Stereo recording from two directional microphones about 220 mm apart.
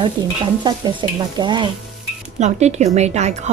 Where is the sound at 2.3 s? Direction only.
30° right (ahead or behind).